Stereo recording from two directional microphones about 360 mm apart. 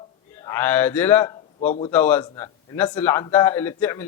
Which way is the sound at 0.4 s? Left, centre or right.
Centre.